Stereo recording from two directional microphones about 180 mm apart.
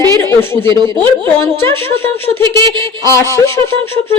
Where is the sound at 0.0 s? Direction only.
15° left (ahead or behind).